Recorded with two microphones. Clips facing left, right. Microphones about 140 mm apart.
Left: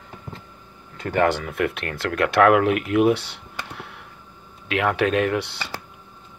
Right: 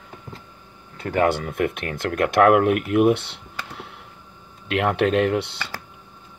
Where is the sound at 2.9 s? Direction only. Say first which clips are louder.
Right 1 dB; 55° right (ahead or behind).